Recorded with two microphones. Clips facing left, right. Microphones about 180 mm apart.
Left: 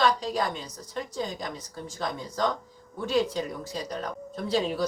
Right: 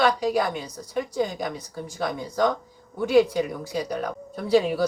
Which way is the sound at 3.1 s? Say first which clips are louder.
Right 7 dB; 65° right (ahead or behind).